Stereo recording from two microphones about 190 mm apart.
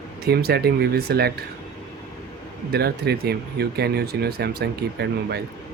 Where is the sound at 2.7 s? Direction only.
55° right (ahead or behind).